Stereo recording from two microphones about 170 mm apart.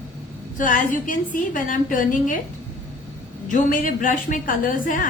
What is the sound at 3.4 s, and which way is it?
A woman's voice, 50° left (ahead or behind).